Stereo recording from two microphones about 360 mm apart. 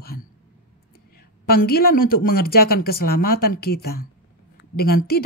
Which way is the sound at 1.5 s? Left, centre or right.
Left.